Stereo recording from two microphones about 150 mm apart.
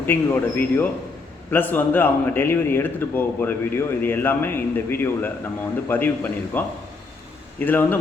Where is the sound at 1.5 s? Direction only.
15° left (ahead or behind).